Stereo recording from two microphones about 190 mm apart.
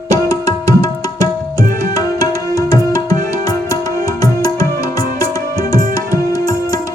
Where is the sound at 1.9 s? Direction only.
20° left (ahead or behind).